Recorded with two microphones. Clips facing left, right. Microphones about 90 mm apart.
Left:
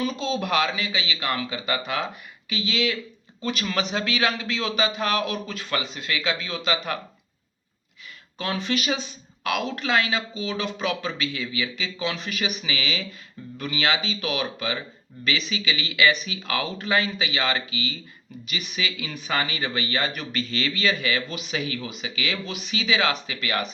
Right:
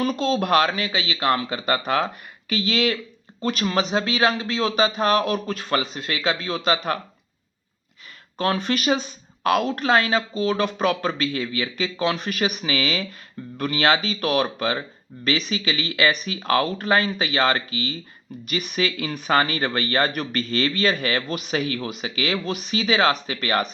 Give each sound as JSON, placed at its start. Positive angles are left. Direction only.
{"t": 0.0, "sound": "speech", "side_deg": -55}
{"t": 3.4, "sound": "speech", "side_deg": -40}
{"t": 8.4, "sound": "speech", "side_deg": -45}